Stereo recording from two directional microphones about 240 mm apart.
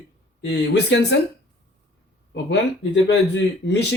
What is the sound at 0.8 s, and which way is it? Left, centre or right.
Speech, left.